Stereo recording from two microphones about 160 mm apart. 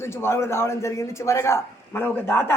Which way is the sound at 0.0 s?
15° left (ahead or behind).